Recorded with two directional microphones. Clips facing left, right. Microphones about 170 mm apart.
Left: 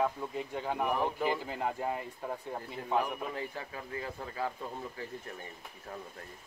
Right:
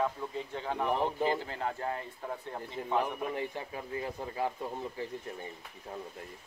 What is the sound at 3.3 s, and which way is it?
Speech, 20° right (ahead or behind).